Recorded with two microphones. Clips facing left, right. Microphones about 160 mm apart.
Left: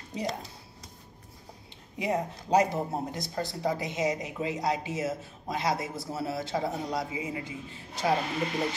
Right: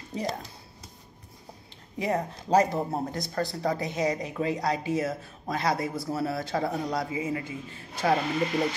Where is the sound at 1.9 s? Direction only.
15° left (ahead or behind).